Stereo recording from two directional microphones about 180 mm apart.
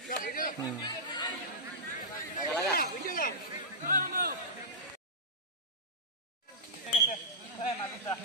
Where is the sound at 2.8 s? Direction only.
50° left (ahead or behind).